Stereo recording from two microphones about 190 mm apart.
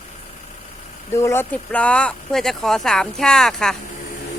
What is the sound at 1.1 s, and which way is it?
Speech, 15° left (ahead or behind).